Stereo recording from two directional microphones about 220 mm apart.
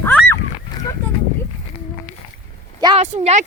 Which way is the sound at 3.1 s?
30° right (ahead or behind).